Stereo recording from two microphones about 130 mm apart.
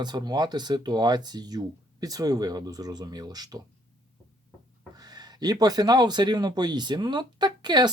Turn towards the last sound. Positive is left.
turn(degrees=-35)  # may be behind; listen again after turning